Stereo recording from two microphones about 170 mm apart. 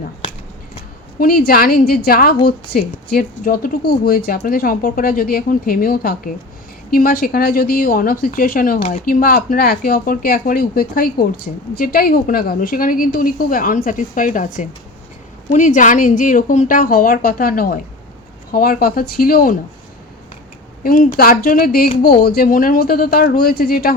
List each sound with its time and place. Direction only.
1.2 s a woman's voice: 60° left (ahead or behind)
20.8 s speech: 50° left (ahead or behind)